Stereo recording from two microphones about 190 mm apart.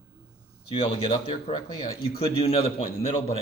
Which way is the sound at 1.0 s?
25° left (ahead or behind).